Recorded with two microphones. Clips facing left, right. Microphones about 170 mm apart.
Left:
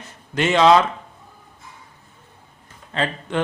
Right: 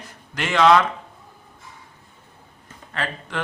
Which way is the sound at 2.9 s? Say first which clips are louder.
Left 5 dB; 20° left (ahead or behind).